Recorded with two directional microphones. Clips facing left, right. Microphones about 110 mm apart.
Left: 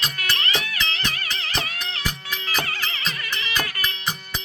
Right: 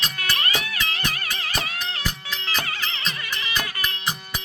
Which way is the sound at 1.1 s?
45° right (ahead or behind).